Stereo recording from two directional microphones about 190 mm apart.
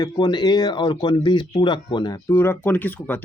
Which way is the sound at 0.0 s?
20° left (ahead or behind).